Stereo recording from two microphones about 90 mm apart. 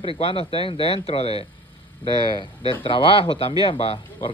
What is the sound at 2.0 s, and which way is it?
Speech, 70° left (ahead or behind).